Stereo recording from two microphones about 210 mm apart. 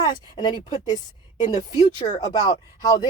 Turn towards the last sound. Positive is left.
turn(degrees=15)  # may be behind; listen again after turning